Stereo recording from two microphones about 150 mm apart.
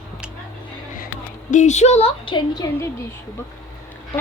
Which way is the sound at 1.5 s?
50° left (ahead or behind).